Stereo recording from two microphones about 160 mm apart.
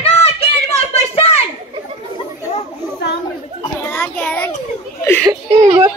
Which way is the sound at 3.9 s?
10° left (ahead or behind).